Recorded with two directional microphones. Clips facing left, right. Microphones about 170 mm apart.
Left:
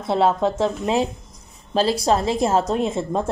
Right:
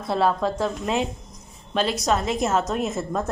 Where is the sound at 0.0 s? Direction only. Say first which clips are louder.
Left 3 dB; 25° left (ahead or behind).